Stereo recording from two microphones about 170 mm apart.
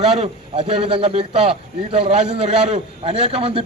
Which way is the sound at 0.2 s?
30° right (ahead or behind).